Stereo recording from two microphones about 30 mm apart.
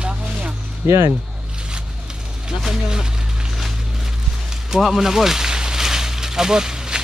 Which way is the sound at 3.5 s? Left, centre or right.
Centre.